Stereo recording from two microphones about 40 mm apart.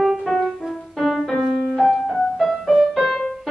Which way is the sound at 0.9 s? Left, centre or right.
Centre.